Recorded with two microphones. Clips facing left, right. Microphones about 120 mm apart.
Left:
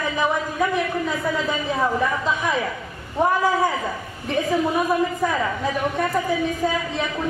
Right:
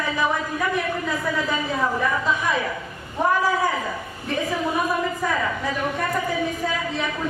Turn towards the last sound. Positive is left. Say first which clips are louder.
# left 2 dB
turn(degrees=20)  # may be behind; listen again after turning